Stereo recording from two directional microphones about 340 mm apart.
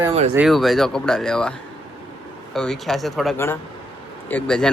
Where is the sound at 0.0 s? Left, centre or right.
Centre.